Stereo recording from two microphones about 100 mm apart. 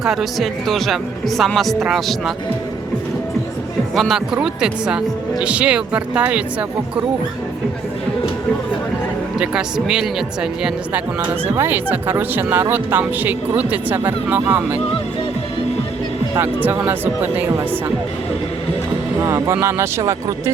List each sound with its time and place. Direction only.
0.0 s speech: 5° right (ahead or behind)
3.9 s speech: centre (ahead or behind)
9.4 s speech: 10° right (ahead or behind)
11.5 s speech: 20° right (ahead or behind)
16.3 s speech: 20° right (ahead or behind)
19.2 s speech: 30° right (ahead or behind)